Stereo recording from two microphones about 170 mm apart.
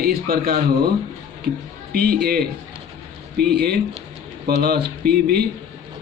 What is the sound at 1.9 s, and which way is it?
Speech, 65° right (ahead or behind).